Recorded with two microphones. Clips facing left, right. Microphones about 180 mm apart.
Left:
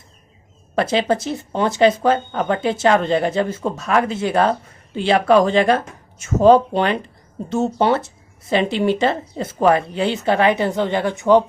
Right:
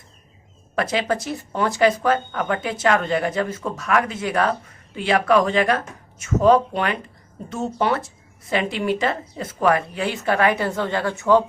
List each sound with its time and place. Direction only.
0.8 s speech: 25° left (ahead or behind)